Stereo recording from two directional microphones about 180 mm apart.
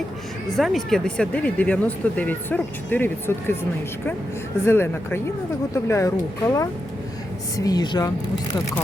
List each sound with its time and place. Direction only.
0.5 s speech: centre (ahead or behind); by 8.1 s 20° left (ahead or behind)